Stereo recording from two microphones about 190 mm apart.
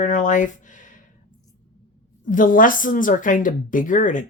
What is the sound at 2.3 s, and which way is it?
A woman's voice, 45° left (ahead or behind).